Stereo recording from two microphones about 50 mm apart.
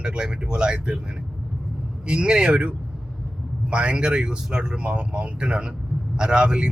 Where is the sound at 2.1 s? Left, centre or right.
Centre.